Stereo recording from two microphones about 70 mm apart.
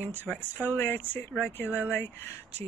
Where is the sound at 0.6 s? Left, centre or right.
Left.